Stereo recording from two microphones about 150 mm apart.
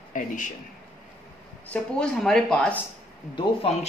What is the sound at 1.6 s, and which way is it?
Speech, 10° left (ahead or behind).